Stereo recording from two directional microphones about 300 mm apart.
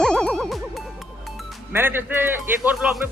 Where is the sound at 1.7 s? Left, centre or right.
Centre.